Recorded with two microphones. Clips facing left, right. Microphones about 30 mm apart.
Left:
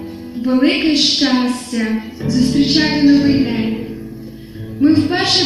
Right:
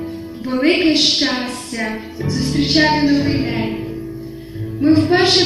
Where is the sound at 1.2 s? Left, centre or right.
Centre.